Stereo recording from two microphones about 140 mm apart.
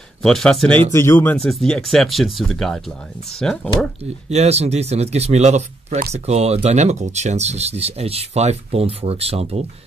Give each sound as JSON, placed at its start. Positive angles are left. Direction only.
{"t": 0.2, "sound": "speech", "side_deg": 5}
{"t": 0.9, "sound": "speech", "side_deg": 15}
{"t": 1.3, "sound": "speech", "side_deg": 5}
{"t": 4.0, "sound": "speech", "side_deg": -50}